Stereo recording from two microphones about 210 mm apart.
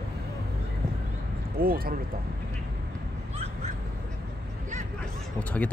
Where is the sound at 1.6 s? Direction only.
45° right (ahead or behind).